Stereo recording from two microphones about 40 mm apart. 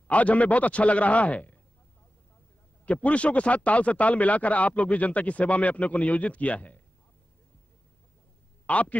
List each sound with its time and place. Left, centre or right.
0.1 s speech: left
2.8 s speech: left
8.6 s a man's voice: left